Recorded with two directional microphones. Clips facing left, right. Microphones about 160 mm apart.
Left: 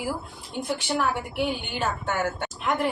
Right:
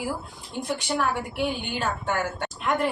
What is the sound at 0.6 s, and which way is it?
A woman's voice, 5° left (ahead or behind).